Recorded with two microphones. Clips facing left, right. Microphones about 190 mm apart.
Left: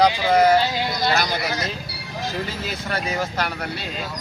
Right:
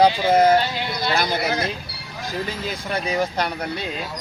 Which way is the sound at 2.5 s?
15° right (ahead or behind).